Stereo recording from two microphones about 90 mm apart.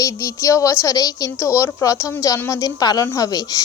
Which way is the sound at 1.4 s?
30° left (ahead or behind).